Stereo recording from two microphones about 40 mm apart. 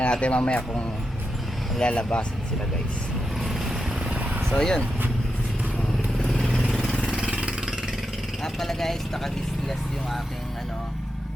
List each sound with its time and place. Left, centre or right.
0.0 s speech: left
3.4 s vehicle: centre
4.5 s speech: centre
6.1 s vehicle: centre
6.9 s vehicle: centre
7.3 s vehicle: right
8.4 s speech: centre